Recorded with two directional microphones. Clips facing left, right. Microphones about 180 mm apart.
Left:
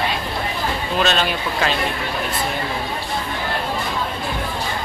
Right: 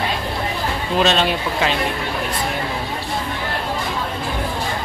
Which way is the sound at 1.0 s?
25° right (ahead or behind).